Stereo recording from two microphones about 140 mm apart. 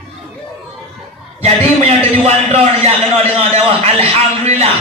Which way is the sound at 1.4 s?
45° right (ahead or behind).